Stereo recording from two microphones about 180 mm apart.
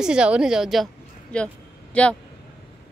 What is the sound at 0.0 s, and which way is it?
A woman's voice, 5° right (ahead or behind).